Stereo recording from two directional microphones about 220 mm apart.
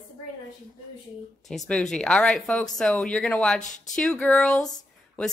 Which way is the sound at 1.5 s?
5° left (ahead or behind).